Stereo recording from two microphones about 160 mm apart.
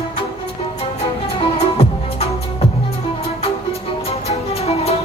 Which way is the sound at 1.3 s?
40° left (ahead or behind).